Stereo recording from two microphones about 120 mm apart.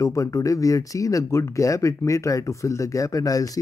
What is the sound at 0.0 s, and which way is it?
Speech, 25° left (ahead or behind).